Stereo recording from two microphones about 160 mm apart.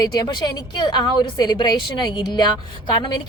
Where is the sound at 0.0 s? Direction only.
25° left (ahead or behind).